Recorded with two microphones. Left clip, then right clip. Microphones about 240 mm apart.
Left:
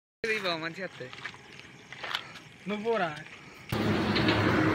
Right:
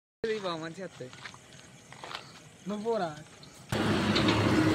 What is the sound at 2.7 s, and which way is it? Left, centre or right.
Speech, left.